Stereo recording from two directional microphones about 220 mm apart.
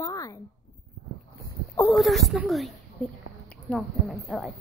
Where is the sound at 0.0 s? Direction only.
15° left (ahead or behind).